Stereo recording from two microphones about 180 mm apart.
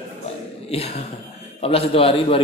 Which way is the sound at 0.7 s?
35° left (ahead or behind).